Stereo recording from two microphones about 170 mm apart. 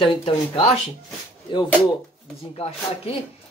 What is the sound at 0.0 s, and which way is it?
Speech, 30° left (ahead or behind).